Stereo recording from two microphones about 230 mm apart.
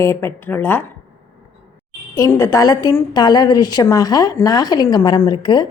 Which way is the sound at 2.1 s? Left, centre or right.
Centre.